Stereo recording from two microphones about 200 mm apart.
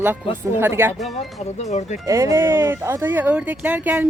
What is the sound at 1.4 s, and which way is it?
Speech, 35° left (ahead or behind).